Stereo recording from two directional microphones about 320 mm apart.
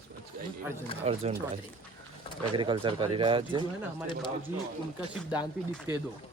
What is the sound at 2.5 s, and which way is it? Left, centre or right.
Speech, centre.